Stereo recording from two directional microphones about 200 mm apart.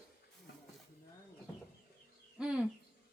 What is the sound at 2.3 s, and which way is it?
Bird, 5° right (ahead or behind).